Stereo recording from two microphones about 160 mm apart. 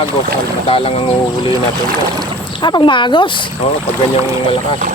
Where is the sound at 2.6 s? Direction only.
30° left (ahead or behind).